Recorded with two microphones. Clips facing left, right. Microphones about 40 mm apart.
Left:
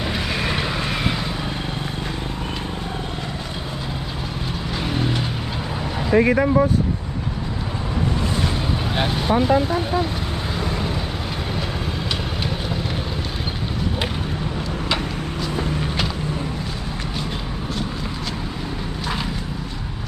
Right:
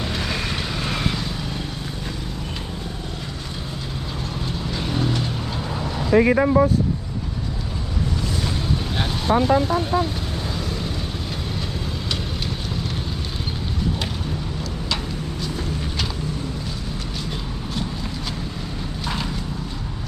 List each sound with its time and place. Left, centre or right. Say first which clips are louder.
0.0 s vehicle: left 2 dB; centre
4.8 s vehicle: left 1 dB; centre
9.0 s vehicle: left 3 dB; centre
9.3 s speech: right 1 dB; centre
10.6 s vehicle: left 3 dB; left
15.5 s vehicle: left 4 dB; left
19.0 s vehicle: left 1 dB; centre